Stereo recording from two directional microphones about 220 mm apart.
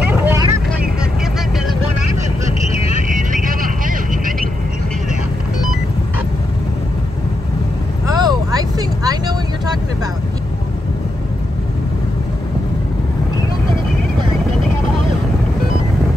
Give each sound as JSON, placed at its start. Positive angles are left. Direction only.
{"t": 0.0, "sound": "vehicle", "side_deg": -10}
{"t": 3.0, "sound": "vehicle", "side_deg": -35}
{"t": 8.1, "sound": "vehicle", "side_deg": -15}